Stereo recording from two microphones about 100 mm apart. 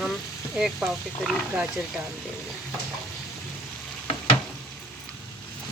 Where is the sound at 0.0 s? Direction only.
5° right (ahead or behind).